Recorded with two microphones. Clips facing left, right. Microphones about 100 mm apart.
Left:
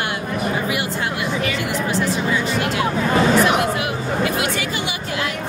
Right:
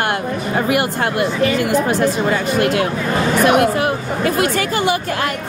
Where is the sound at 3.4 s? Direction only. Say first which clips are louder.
Right 4 dB; 55° right (ahead or behind).